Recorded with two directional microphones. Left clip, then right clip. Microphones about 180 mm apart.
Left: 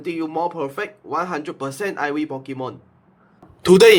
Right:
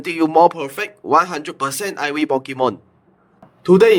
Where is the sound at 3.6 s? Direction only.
50° left (ahead or behind).